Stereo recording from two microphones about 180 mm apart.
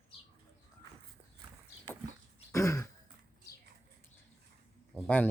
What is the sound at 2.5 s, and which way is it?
Throat clearing, 15° left (ahead or behind).